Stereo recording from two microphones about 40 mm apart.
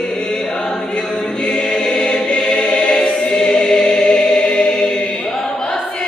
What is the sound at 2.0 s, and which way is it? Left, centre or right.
Choir, left.